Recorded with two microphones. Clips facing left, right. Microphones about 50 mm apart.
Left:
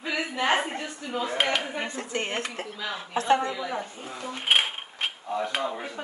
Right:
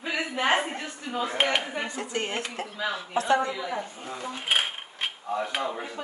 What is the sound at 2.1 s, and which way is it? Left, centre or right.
Speech, left.